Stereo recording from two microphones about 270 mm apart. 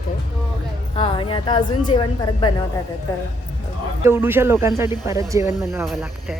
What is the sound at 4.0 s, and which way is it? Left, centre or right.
Speech, centre.